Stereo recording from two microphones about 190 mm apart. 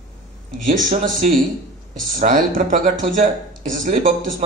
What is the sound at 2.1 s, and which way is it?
Speech, 45° right (ahead or behind).